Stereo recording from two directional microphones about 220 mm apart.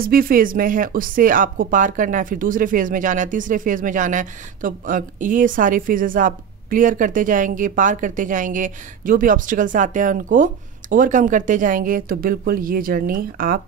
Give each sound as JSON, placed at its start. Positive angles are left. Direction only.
{"t": 0.0, "sound": "speech", "side_deg": -40}